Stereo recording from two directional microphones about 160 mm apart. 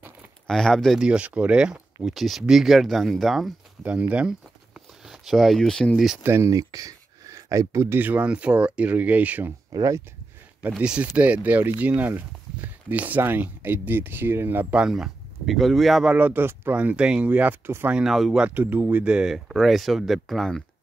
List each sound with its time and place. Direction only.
0.5 s speech: 5° left (ahead or behind)
6.2 s speech: 15° right (ahead or behind)
9.7 s speech: 20° right (ahead or behind)
10.7 s speech: 5° right (ahead or behind)